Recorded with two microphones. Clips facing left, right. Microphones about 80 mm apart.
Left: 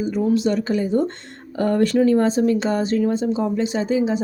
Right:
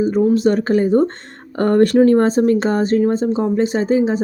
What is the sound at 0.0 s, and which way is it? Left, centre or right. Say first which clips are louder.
Speech: right 5 dB; right.